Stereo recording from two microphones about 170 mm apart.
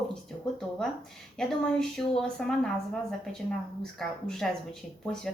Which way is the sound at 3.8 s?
5° left (ahead or behind).